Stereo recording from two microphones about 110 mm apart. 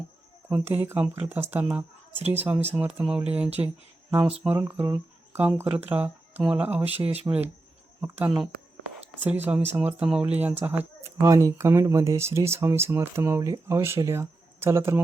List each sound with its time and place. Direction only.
0.5 s speech: 15° right (ahead or behind)